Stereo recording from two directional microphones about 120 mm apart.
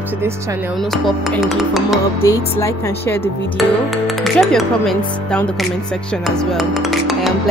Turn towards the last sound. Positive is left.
turn(degrees=0)  # may be behind; listen again after turning